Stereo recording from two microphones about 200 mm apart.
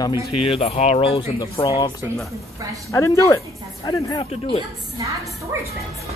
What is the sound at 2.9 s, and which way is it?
Speech, 15° left (ahead or behind).